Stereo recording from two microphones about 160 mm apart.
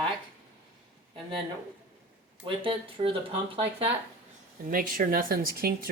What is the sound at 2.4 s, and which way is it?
Speech, 35° right (ahead or behind).